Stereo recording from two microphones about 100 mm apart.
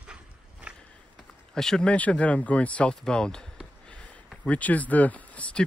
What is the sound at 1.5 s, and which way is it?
Speech, 5° left (ahead or behind).